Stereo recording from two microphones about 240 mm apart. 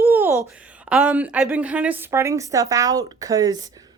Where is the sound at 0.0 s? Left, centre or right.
Centre.